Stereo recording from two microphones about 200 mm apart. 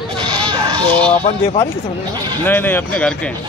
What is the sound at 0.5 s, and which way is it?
Bleat, 20° right (ahead or behind).